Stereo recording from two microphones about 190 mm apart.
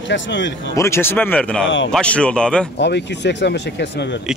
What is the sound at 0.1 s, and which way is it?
Speech, 75° left (ahead or behind).